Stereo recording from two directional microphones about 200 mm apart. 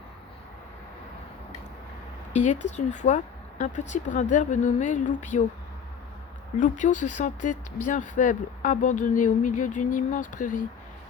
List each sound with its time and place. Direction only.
2.3 s speech: 35° left (ahead or behind)
6.6 s speech: 40° left (ahead or behind)